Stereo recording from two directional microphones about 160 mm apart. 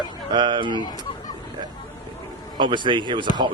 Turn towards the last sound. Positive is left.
turn(degrees=-30)  # may be behind; listen again after turning